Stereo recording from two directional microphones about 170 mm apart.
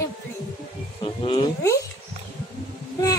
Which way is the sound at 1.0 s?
30° left (ahead or behind).